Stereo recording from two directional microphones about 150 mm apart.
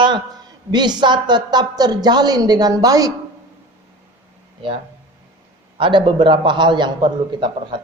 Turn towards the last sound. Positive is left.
turn(degrees=-30)  # may be behind; listen again after turning